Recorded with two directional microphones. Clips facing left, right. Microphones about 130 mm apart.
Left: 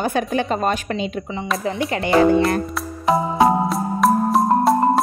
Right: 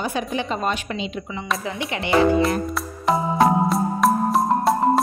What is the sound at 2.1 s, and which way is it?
Speech, centre (ahead or behind).